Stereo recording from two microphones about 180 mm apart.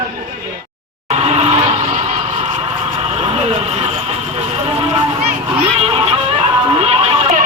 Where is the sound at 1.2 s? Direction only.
35° right (ahead or behind).